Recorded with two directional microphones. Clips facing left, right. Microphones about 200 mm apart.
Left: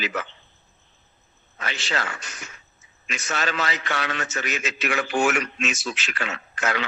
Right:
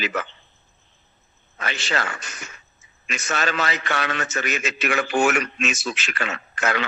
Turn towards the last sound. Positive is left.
turn(degrees=-55)  # may be behind; listen again after turning